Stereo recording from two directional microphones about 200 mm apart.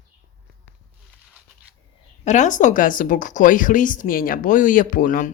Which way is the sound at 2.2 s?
35° left (ahead or behind).